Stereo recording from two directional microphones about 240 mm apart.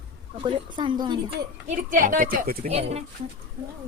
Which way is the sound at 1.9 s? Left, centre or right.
Right.